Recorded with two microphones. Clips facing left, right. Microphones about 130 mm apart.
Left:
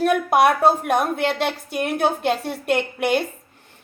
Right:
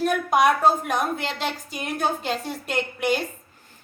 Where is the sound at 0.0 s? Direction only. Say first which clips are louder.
Left 3 dB; 60° left (ahead or behind).